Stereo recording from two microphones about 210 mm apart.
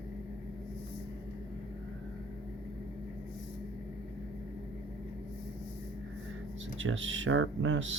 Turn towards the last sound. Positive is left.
turn(degrees=-65)  # may be behind; listen again after turning